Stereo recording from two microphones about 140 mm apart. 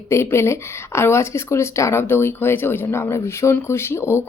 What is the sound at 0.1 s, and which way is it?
Speech, 20° left (ahead or behind).